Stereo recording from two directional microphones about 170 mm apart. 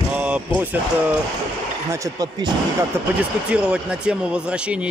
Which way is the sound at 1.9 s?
20° right (ahead or behind).